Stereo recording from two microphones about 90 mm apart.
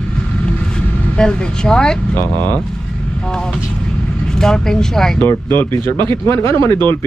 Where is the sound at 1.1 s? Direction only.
10° left (ahead or behind).